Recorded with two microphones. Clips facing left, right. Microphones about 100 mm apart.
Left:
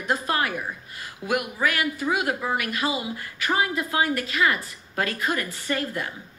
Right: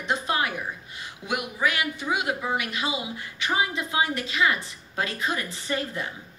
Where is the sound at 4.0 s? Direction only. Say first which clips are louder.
Left 1 dB; 25° right (ahead or behind).